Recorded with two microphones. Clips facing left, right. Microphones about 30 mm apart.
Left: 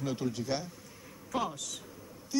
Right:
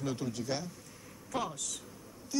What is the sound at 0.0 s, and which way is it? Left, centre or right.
A woman's voice, centre.